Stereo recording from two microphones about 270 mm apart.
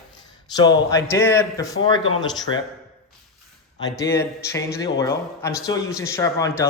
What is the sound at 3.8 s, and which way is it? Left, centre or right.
Speech, centre.